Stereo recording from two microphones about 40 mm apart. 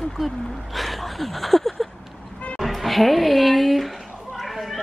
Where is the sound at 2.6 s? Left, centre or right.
Centre.